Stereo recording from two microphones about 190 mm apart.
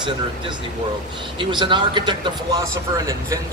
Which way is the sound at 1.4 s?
25° right (ahead or behind).